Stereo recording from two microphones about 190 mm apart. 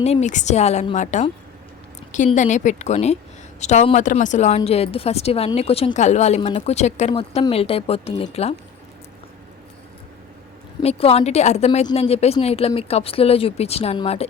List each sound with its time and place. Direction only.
0.0 s a woman's voice: 35° left (ahead or behind)
7.1 s a woman's voice: 25° left (ahead or behind)
10.8 s a woman's voice: 30° left (ahead or behind)